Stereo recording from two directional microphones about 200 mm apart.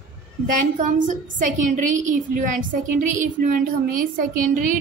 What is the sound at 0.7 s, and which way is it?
A woman's voice, 40° right (ahead or behind).